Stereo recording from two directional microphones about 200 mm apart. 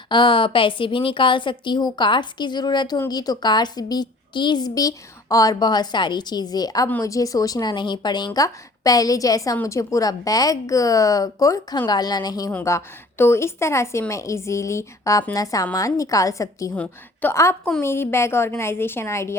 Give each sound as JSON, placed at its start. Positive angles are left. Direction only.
{"t": 0.1, "sound": "a woman's voice", "side_deg": 25}